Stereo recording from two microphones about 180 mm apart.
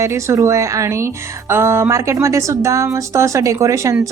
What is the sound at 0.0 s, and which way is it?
Speech, 15° right (ahead or behind).